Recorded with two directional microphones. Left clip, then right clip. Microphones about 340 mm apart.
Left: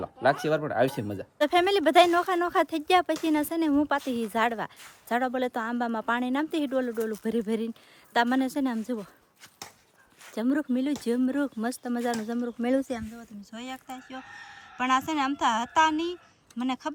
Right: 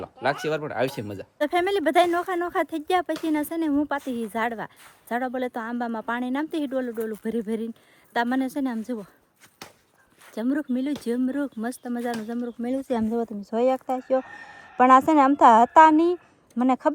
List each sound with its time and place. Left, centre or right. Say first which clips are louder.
0.0 s speech: left 1 dB; centre
10.2 s speech: right 1 dB; centre